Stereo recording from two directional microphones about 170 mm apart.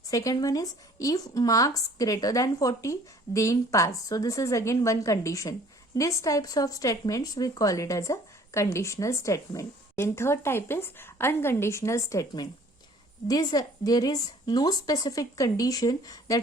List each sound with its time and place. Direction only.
0.1 s speech: 20° left (ahead or behind)